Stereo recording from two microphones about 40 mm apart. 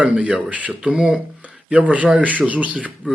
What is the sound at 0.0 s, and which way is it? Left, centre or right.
Speech, right.